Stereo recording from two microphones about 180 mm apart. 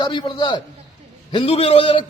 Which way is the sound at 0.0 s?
25° left (ahead or behind).